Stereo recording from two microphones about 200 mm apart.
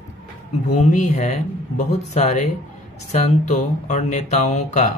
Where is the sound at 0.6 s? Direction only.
35° left (ahead or behind).